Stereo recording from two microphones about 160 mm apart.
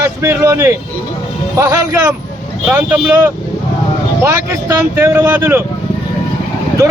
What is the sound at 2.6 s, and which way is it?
Speech, 10° right (ahead or behind).